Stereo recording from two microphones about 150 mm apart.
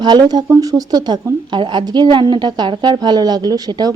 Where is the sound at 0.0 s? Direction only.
30° right (ahead or behind).